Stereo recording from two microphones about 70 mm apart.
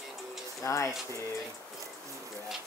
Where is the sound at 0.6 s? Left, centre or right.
Left.